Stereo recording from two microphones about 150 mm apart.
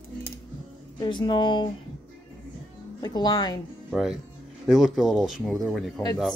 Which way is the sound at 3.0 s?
25° left (ahead or behind).